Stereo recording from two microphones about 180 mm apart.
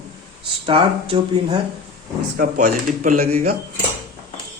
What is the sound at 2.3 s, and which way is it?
Speech, 50° right (ahead or behind).